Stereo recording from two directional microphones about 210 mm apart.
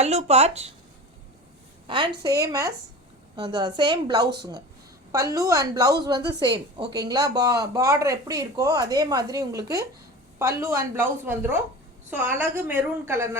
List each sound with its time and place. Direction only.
0.0 s speech: 30° right (ahead or behind)
1.9 s a woman's voice: 20° right (ahead or behind)